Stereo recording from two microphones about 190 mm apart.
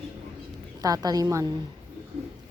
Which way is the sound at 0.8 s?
20° right (ahead or behind).